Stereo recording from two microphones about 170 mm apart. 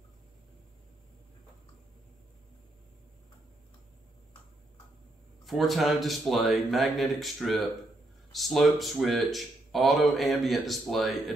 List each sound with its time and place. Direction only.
5.4 s speech: centre (ahead or behind)